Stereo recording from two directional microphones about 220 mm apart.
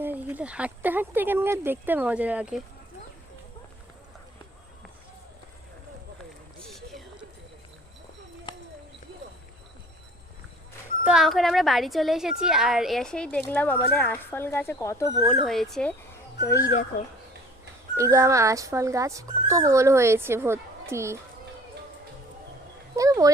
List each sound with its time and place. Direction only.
0.0 s speech: 10° right (ahead or behind)
6.6 s vehicle: centre (ahead or behind)
8.5 s clip-clop: 20° left (ahead or behind)
11.0 s a woman's voice: 5° right (ahead or behind); by 15.1 s 15° left (ahead or behind)
15.3 s a woman's voice: centre (ahead or behind)
17.9 s speech: 15° right (ahead or behind)
23.0 s speech: 15° right (ahead or behind)